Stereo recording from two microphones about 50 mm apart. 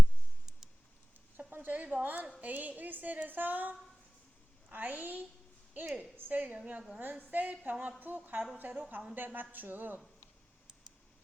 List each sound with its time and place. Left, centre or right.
1.4 s a sound: right
2.4 s a woman's voice: right
5.8 s a woman's voice: right
6.1 s a woman's voice: right
9.1 s a woman's voice: right